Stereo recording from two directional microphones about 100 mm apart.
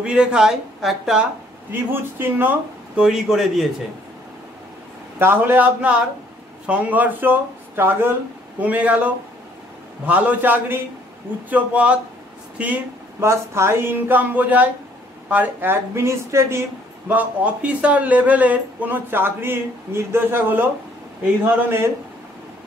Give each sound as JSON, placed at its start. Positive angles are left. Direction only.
{"t": 0.0, "sound": "speech", "side_deg": -10}
{"t": 1.7, "sound": "speech", "side_deg": -20}
{"t": 3.0, "sound": "a man's voice", "side_deg": -5}
{"t": 5.2, "sound": "speech", "side_deg": -20}
{"t": 13.2, "sound": "speech", "side_deg": -25}
{"t": 17.1, "sound": "speech", "side_deg": -15}
{"t": 21.6, "sound": "speech", "side_deg": -25}